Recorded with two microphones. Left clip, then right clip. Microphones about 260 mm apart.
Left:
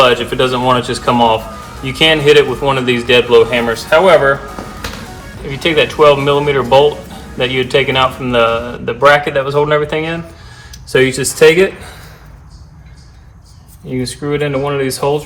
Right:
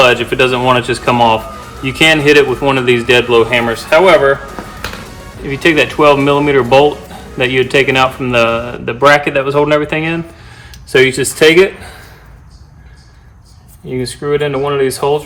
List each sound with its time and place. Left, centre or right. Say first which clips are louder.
0.0 s a man's voice: right 1 dB; right
5.5 s a man's voice: right 2 dB; right
13.9 s a man's voice: right 3 dB; right